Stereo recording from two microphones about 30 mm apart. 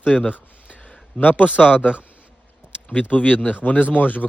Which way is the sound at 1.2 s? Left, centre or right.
Left.